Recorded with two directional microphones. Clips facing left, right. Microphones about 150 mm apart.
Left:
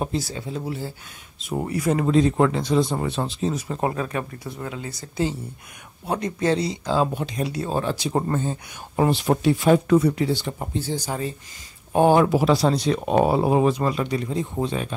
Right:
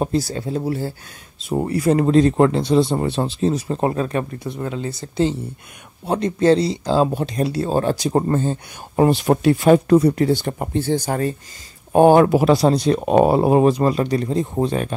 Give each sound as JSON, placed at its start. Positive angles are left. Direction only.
{"t": 0.0, "sound": "speech", "side_deg": -40}
{"t": 8.2, "sound": "speech", "side_deg": -30}
{"t": 8.9, "sound": "speech", "side_deg": -45}
{"t": 13.7, "sound": "speech", "side_deg": -35}